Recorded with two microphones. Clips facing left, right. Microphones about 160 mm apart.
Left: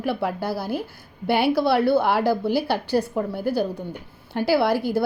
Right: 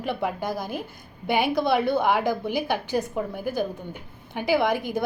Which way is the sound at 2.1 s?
10° left (ahead or behind).